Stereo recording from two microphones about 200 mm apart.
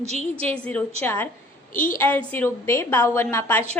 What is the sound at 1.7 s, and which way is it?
Speech, 45° left (ahead or behind).